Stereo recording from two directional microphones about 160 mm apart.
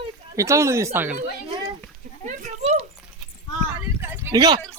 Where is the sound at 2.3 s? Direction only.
45° right (ahead or behind).